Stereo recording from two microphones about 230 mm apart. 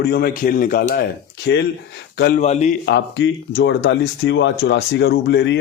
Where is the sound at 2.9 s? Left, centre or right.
Left.